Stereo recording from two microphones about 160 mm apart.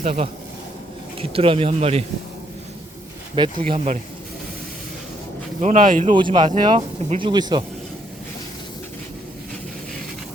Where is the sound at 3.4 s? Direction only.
30° right (ahead or behind).